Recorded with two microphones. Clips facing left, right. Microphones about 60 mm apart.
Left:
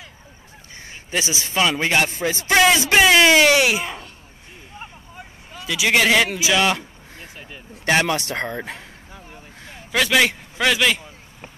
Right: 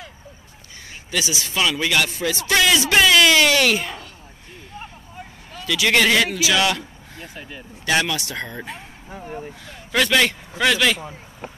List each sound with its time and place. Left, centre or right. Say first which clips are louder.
1.1 s speech: left 1 dB; left
5.5 s speech: even; centre
7.3 s vehicle: right 4 dB; centre
7.8 s speech: left 2 dB; left
9.1 s vehicle: right 13 dB; right
9.9 s a man's voice: even; centre